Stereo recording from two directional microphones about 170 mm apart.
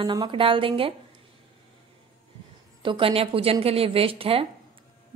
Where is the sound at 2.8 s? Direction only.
30° right (ahead or behind).